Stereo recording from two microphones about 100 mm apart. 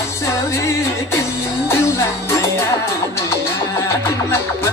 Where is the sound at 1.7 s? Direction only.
30° left (ahead or behind).